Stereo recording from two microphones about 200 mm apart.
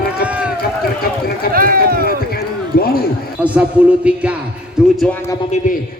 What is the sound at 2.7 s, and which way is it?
Speech, 50° left (ahead or behind).